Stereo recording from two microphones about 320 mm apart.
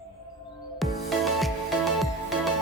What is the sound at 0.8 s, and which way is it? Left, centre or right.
Music, centre.